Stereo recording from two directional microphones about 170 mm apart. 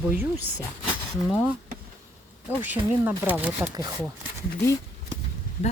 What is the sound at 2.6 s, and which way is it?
Speech, 10° right (ahead or behind).